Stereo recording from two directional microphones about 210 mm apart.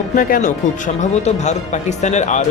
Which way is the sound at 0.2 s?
40° left (ahead or behind).